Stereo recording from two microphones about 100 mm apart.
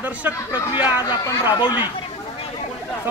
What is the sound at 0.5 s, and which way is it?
Speech, 50° left (ahead or behind).